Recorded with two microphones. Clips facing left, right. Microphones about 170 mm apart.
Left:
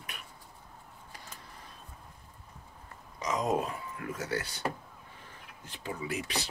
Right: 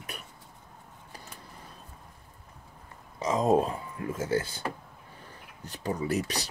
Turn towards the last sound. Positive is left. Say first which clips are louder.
# right 5 dB
turn(degrees=-40)  # may be behind; listen again after turning